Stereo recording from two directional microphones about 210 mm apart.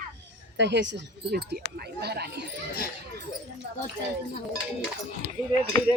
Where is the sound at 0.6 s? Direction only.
55° right (ahead or behind).